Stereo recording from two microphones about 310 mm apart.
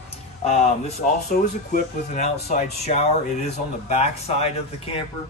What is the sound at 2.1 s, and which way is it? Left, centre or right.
Speech, left.